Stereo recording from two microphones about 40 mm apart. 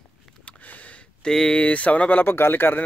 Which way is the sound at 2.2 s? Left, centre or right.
Left.